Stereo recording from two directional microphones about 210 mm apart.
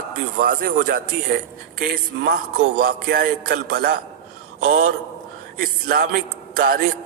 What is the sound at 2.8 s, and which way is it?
A man's voice, 45° right (ahead or behind).